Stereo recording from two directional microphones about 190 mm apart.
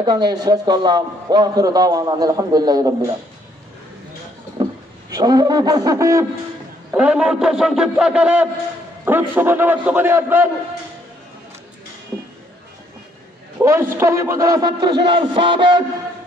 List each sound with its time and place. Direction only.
0.0 s a man's voice: 20° right (ahead or behind)
5.1 s a man's voice: 20° right (ahead or behind)
6.9 s a man's voice: 5° right (ahead or behind)
13.6 s a man's voice: 15° right (ahead or behind)